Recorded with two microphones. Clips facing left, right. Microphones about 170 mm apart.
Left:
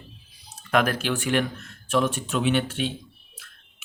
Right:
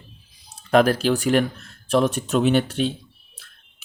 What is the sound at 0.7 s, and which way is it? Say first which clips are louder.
Speech: right 6 dB; 35° right (ahead or behind).